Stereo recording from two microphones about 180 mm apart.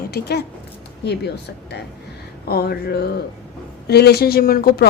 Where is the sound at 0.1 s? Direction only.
65° left (ahead or behind).